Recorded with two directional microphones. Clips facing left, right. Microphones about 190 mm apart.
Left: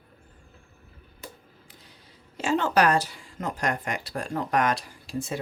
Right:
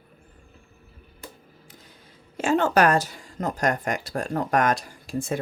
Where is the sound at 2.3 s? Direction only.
50° right (ahead or behind).